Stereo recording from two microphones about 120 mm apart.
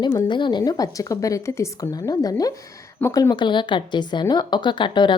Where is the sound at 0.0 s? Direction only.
35° left (ahead or behind).